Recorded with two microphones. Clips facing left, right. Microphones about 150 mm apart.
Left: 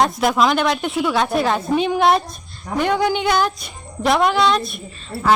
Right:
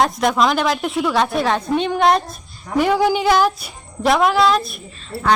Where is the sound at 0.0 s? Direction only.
Centre (ahead or behind).